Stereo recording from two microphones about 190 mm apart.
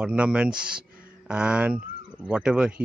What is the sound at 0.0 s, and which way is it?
A man's voice, 5° right (ahead or behind).